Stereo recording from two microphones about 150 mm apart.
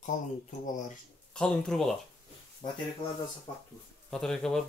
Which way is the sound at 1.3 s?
5° left (ahead or behind).